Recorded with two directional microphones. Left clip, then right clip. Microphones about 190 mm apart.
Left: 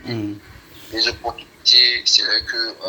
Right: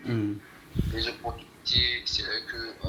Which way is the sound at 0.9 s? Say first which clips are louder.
Left 12 dB; 40° left (ahead or behind).